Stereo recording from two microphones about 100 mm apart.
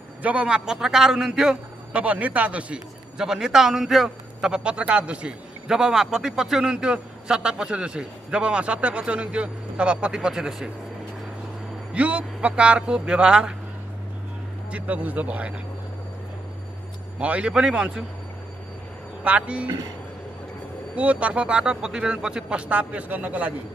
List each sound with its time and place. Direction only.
0.2 s a man's voice: 10° right (ahead or behind)
11.9 s a man's voice: 15° right (ahead or behind)
14.7 s a man's voice: 15° right (ahead or behind)
17.2 s a man's voice: 10° right (ahead or behind)
19.2 s a man's voice: 10° right (ahead or behind)
20.9 s a man's voice: 15° right (ahead or behind)